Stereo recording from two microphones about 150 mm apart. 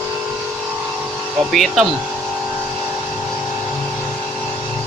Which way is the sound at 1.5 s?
Centre (ahead or behind).